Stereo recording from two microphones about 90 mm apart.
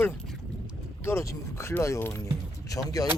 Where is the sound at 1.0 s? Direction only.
30° left (ahead or behind).